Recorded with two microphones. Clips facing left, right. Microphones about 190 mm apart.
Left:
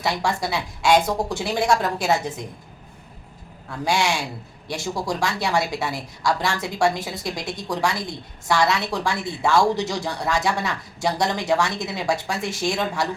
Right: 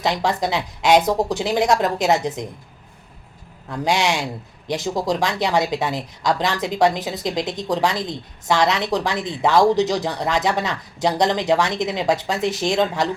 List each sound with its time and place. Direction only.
0.0 s a woman's voice: 20° right (ahead or behind)
3.7 s a woman's voice: 20° right (ahead or behind)